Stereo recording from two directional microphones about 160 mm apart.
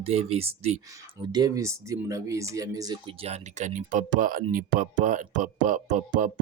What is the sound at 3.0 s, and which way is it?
Speech, 40° right (ahead or behind).